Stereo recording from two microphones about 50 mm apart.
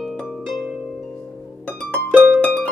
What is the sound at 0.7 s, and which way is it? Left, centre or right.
Harp, centre.